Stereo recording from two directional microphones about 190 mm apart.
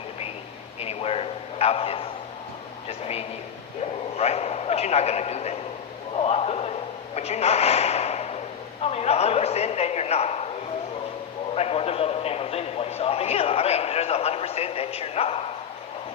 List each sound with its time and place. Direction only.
0.8 s a sound: 30° left (ahead or behind)
4.2 s a man's voice: 35° left (ahead or behind)
11.5 s a man's voice: 30° left (ahead or behind)